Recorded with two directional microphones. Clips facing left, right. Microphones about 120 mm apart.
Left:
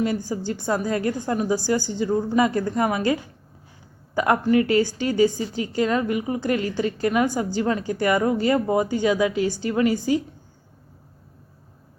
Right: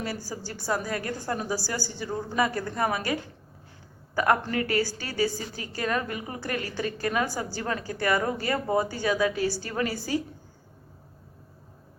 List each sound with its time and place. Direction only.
0.0 s a woman's voice: 20° left (ahead or behind)